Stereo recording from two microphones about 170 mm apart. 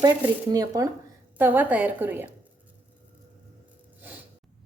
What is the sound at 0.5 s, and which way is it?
Speech, 20° right (ahead or behind).